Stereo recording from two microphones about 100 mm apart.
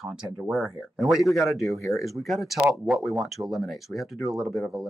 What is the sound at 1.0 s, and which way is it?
Speech, centre (ahead or behind).